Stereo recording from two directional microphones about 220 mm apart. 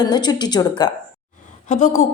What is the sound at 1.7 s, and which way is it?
Speech, 35° left (ahead or behind).